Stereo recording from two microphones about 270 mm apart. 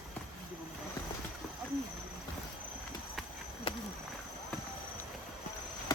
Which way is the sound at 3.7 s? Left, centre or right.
Left.